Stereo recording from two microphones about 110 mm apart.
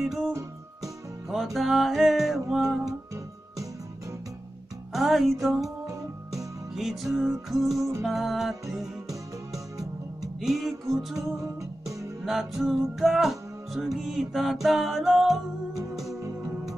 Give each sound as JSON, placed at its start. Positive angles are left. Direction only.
{"t": 0.0, "sound": "music", "side_deg": 0}
{"t": 0.3, "sound": "music", "side_deg": -25}
{"t": 1.3, "sound": "music", "side_deg": 0}
{"t": 4.9, "sound": "music", "side_deg": 0}
{"t": 6.7, "sound": "music", "side_deg": 0}
{"t": 9.1, "sound": "music", "side_deg": -30}
{"t": 10.4, "sound": "music", "side_deg": 0}
{"t": 12.3, "sound": "music", "side_deg": 0}